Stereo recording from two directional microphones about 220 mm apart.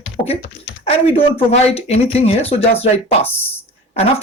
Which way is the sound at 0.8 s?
25° left (ahead or behind).